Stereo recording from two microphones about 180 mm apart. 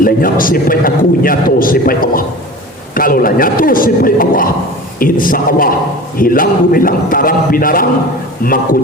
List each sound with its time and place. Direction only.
0.0 s a man's voice: 50° left (ahead or behind)